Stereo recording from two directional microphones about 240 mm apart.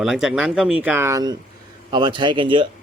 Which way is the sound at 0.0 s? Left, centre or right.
Centre.